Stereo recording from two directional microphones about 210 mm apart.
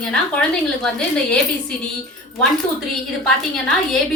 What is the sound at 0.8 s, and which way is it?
Speech, 5° left (ahead or behind).